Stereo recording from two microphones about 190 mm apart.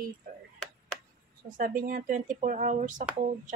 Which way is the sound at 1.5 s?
45° right (ahead or behind).